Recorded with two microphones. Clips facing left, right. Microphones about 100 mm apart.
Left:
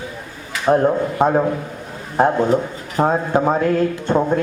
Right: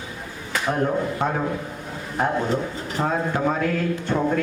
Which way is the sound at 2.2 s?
30° left (ahead or behind).